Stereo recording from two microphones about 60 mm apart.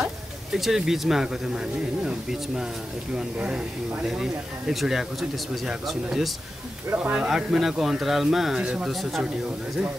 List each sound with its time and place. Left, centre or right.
0.0 s speech: centre
7.0 s speech: right
7.2 s speech: centre